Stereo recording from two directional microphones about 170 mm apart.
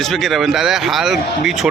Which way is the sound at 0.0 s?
Centre (ahead or behind).